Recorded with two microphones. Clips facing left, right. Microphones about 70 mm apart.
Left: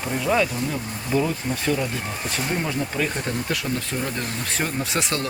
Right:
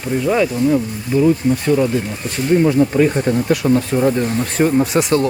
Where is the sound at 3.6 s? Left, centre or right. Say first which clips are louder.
Right 12 dB; right.